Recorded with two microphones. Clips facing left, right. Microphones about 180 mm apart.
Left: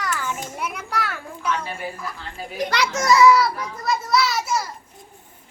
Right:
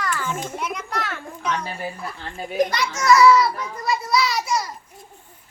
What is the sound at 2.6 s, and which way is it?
Speech, 50° right (ahead or behind).